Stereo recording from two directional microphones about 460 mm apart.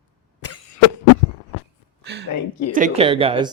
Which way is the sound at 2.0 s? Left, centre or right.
Right.